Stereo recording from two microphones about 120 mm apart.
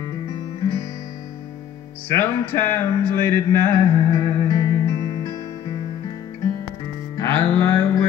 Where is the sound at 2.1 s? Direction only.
20° left (ahead or behind).